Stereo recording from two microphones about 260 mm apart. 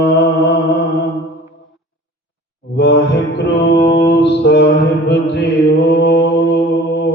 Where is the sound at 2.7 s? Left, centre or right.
Left.